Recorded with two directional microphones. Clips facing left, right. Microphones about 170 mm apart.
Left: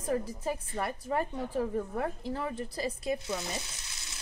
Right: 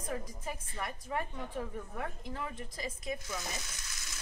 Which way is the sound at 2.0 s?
35° left (ahead or behind).